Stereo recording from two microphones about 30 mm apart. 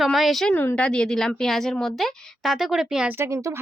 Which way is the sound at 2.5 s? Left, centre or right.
Centre.